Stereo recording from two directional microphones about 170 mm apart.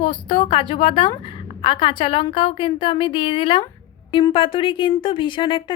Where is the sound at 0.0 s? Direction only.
30° left (ahead or behind).